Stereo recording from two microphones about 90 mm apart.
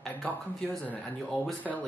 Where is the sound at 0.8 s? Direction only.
15° left (ahead or behind).